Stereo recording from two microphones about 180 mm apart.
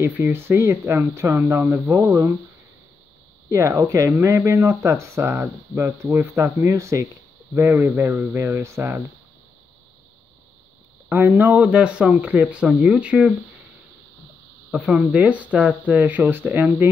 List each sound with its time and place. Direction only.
0.0 s speech: 15° right (ahead or behind)
3.4 s speech: 15° right (ahead or behind)
11.1 s speech: 10° right (ahead or behind)
14.7 s speech: 5° right (ahead or behind)